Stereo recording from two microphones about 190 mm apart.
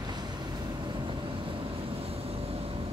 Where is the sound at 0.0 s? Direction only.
20° right (ahead or behind).